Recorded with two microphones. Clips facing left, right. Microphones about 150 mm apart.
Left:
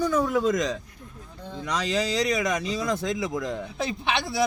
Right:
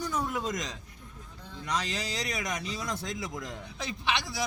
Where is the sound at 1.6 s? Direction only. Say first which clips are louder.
Left 7 dB; 90° left.